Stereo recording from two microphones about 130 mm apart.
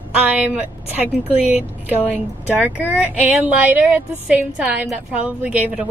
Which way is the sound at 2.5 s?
15° right (ahead or behind).